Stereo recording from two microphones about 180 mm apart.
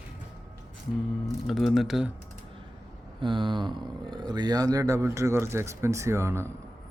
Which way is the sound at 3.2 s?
25° right (ahead or behind).